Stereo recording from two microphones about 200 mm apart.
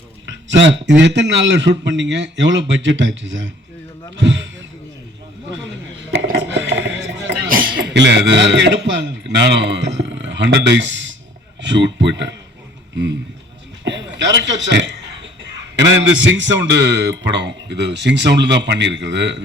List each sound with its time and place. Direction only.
0.3 s a man's voice: 65° right (ahead or behind)
6.1 s a sound: 60° right (ahead or behind)
7.4 s a man's voice: 45° right (ahead or behind); by 12.3 s 65° right (ahead or behind)
13.8 s chuckle: 65° right (ahead or behind)
15.7 s a man's voice: 65° right (ahead or behind)